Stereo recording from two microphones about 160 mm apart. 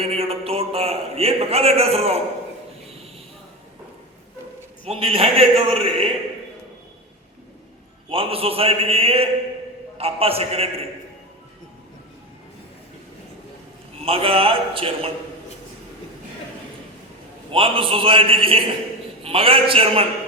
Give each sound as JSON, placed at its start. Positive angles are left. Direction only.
{"t": 0.0, "sound": "a man's voice", "side_deg": -40}
{"t": 4.9, "sound": "a man's voice", "side_deg": -35}
{"t": 8.1, "sound": "a man's voice", "side_deg": -35}
{"t": 14.0, "sound": "a man's voice", "side_deg": -35}
{"t": 17.5, "sound": "a man's voice", "side_deg": -35}